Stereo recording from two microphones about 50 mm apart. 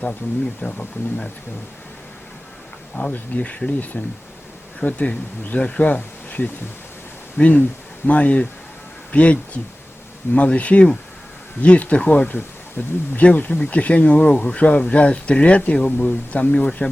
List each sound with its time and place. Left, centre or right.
0.2 s speech: left
0.6 s speech: left
2.9 s speech: left
3.9 s speech: centre
4.9 s speech: left
12.3 s speech: left